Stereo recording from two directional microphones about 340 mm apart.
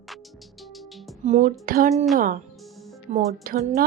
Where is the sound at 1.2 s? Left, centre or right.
Right.